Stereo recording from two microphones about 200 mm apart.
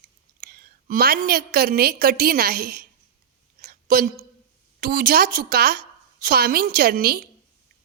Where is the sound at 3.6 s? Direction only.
45° right (ahead or behind).